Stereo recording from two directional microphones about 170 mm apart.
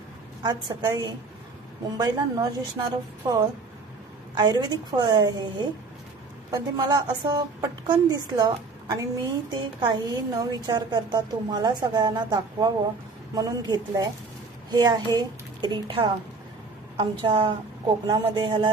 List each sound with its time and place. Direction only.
0.4 s a woman's voice: 20° right (ahead or behind)